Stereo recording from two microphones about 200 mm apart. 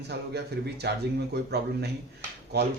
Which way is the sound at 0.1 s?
55° right (ahead or behind).